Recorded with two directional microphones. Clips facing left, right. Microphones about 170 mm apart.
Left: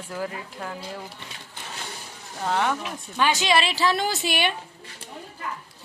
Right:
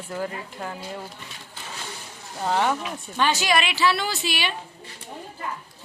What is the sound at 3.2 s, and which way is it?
Speech, 15° left (ahead or behind).